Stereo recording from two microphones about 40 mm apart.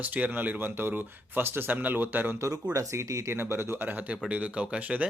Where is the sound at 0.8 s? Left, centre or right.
Right.